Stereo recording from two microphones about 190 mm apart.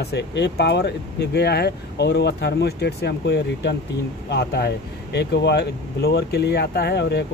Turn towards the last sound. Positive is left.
turn(degrees=60)  # may be behind; listen again after turning